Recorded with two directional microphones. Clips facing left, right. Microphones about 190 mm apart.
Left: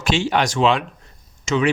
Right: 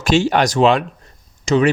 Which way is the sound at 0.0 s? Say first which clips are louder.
Right 4 dB; 40° right (ahead or behind).